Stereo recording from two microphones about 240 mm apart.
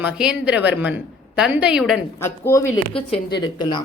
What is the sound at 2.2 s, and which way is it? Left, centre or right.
A woman's voice, centre.